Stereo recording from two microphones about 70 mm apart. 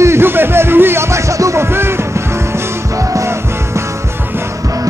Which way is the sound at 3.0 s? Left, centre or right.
Right.